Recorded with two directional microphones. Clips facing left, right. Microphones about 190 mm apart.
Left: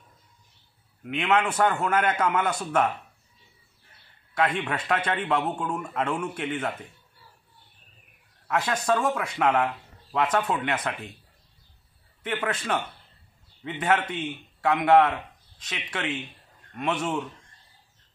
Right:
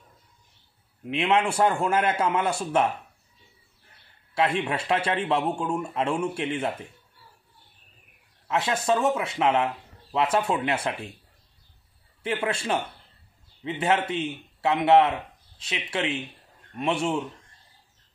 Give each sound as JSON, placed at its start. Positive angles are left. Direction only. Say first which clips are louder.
{"t": 1.0, "sound": "a man's voice", "louder": "right 1 dB", "side_deg": -30}
{"t": 4.6, "sound": "a man's voice", "louder": "right 2 dB", "side_deg": -25}
{"t": 8.5, "sound": "a man's voice", "louder": "right 1 dB", "side_deg": -25}
{"t": 12.4, "sound": "a man's voice", "louder": "even", "side_deg": -25}